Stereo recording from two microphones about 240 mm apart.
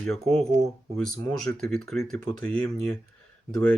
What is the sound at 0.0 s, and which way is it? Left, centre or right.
Speech, centre.